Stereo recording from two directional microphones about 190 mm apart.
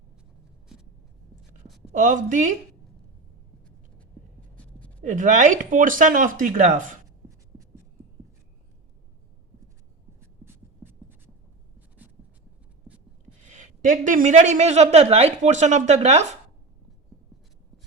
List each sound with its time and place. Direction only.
1.8 s speech: 40° right (ahead or behind)
4.5 s a sound: 5° left (ahead or behind)
5.0 s speech: 40° right (ahead or behind)
10.4 s writing: 10° right (ahead or behind)
13.5 s a woman's voice: 45° right (ahead or behind)